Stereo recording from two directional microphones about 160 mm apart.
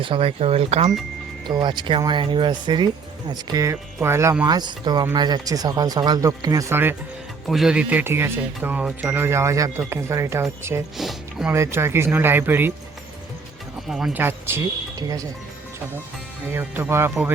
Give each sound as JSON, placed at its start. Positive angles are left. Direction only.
{"t": 0.0, "sound": "speech", "side_deg": -35}
{"t": 1.5, "sound": "speech", "side_deg": -30}
{"t": 7.4, "sound": "speech", "side_deg": 0}
{"t": 10.9, "sound": "speech", "side_deg": 0}
{"t": 11.5, "sound": "speech", "side_deg": -15}
{"t": 13.8, "sound": "speech", "side_deg": 0}
{"t": 14.2, "sound": "speech", "side_deg": -15}
{"t": 16.5, "sound": "speech", "side_deg": -15}